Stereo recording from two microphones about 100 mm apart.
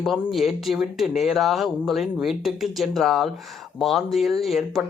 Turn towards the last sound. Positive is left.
turn(degrees=0)  # may be behind; listen again after turning